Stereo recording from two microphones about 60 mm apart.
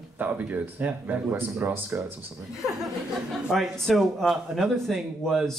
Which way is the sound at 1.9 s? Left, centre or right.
Right.